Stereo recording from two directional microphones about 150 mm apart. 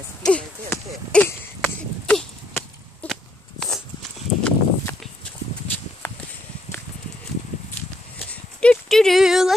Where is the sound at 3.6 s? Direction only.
Centre (ahead or behind).